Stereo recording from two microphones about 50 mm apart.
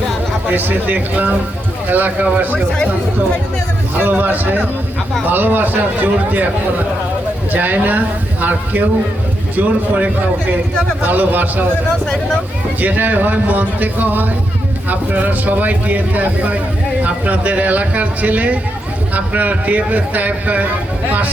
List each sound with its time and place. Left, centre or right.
0.4 s speech: right
4.0 s speech: right
12.0 s speech: centre
12.8 s speech: right